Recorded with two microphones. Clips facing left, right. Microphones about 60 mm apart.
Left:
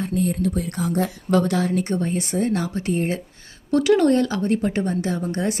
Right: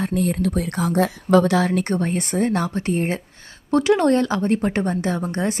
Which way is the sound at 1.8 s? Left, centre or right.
Right.